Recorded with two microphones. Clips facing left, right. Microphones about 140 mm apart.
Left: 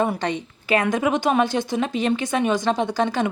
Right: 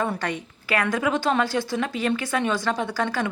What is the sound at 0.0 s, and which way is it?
A woman's voice, 20° left (ahead or behind).